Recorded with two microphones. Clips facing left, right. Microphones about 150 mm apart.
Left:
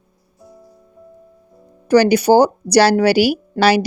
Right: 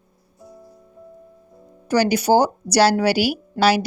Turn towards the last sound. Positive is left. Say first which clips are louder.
# left 3 dB
turn(degrees=75)  # may be behind; listen again after turning